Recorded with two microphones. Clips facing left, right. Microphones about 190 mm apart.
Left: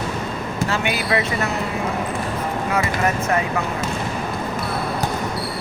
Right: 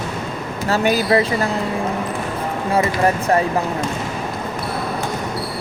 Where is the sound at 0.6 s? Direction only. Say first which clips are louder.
Right 7 dB; 40° right (ahead or behind).